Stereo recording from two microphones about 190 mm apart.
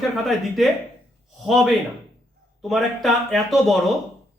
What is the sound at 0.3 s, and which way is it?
Speech, centre (ahead or behind).